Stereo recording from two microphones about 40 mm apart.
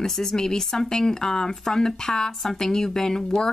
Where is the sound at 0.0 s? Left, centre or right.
Centre.